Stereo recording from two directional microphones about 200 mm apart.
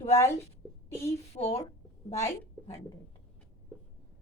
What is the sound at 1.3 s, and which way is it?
Speech, 30° left (ahead or behind).